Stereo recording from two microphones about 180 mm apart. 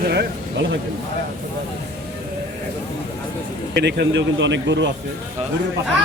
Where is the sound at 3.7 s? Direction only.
70° right (ahead or behind); by 4.9 s 85° right.